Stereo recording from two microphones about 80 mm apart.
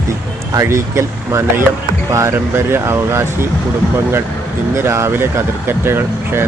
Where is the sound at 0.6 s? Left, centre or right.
Right.